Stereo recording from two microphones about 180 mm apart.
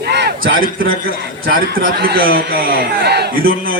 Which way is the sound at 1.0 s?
55° right (ahead or behind).